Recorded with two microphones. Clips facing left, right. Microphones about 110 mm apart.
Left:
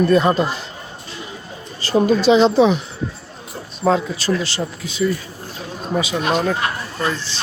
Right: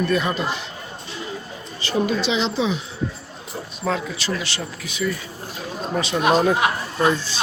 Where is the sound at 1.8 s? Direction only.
40° left (ahead or behind); by 2.8 s 55° left (ahead or behind).